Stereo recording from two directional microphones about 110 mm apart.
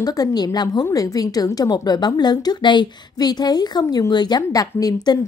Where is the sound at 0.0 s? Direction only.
35° left (ahead or behind).